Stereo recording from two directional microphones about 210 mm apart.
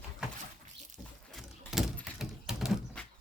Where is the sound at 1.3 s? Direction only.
Centre (ahead or behind).